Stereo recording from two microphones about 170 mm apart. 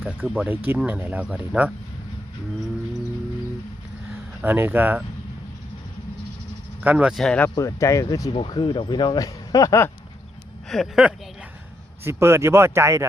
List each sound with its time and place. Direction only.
0.0 s speech: 5° right (ahead or behind)
4.4 s speech: 10° right (ahead or behind)
6.8 s speech: 5° right (ahead or behind)
7.5 s speech: 20° left (ahead or behind)
10.7 s speech: centre (ahead or behind)
12.0 s speech: 15° right (ahead or behind)